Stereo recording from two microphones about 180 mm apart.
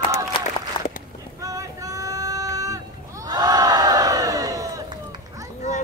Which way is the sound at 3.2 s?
20° right (ahead or behind).